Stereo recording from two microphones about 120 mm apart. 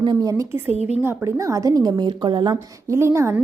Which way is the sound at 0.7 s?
65° left (ahead or behind).